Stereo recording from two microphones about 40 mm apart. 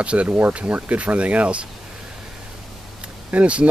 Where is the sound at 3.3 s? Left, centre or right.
Right.